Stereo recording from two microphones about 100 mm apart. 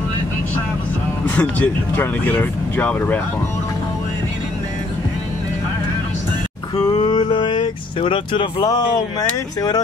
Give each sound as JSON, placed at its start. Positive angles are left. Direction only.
{"t": 1.2, "sound": "speech", "side_deg": 15}
{"t": 6.7, "sound": "speech", "side_deg": 45}